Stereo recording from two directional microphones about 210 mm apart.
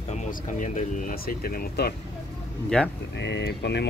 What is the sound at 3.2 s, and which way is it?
Speech, 55° left (ahead or behind).